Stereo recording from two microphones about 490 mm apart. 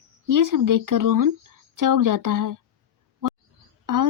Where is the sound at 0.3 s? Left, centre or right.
Right.